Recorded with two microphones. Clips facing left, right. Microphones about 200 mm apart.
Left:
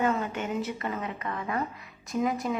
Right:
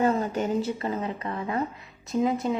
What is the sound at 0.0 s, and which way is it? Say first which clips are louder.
A woman's voice: right 4 dB; 35° right (ahead or behind).